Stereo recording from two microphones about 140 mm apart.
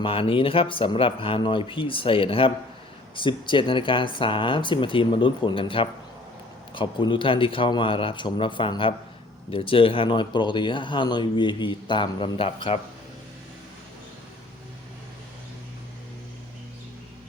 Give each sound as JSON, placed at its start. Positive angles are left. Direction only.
{"t": 0.0, "sound": "speech", "side_deg": 40}